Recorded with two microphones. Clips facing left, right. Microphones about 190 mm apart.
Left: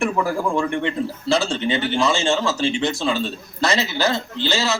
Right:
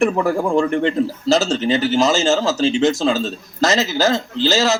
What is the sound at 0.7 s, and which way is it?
A man's voice, 40° right (ahead or behind).